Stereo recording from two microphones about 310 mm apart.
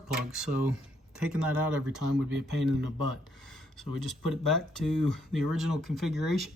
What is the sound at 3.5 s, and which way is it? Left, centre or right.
Speech, centre.